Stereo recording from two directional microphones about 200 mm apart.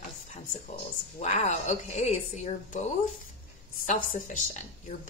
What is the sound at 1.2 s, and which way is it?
A woman's voice, 35° left (ahead or behind).